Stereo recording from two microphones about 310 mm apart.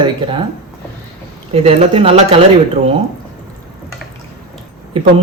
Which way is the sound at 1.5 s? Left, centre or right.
Centre.